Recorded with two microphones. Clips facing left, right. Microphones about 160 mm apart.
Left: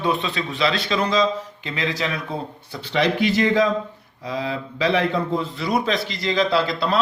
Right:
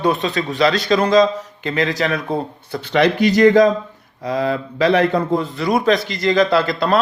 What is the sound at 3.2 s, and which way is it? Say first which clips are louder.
A man's voice: right 9 dB; 40° right (ahead or behind).